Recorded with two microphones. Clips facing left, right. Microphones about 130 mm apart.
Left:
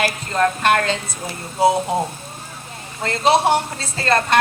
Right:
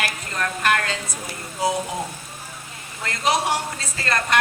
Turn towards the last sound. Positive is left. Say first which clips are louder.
# left 6 dB
turn(degrees=30)  # may be behind; listen again after turning